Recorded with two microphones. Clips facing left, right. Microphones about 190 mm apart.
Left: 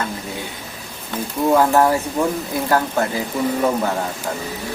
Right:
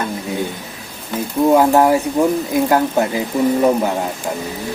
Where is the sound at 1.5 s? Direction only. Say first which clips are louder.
Right 2 dB; 15° right (ahead or behind).